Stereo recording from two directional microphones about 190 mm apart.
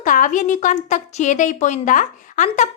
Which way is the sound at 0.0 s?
45° left (ahead or behind).